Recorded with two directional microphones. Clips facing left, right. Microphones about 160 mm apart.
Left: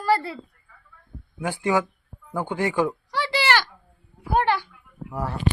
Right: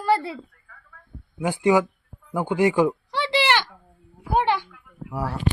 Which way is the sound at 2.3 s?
15° right (ahead or behind).